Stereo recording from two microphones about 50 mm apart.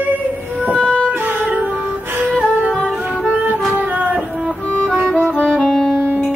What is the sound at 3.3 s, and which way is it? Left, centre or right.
Music, right.